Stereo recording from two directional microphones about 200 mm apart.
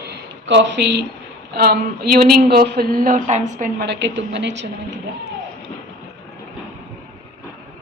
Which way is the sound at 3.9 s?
60° right (ahead or behind).